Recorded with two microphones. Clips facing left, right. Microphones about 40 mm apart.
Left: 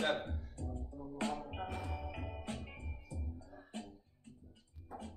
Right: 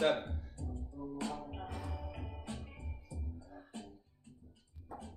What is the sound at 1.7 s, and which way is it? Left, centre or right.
Music, left.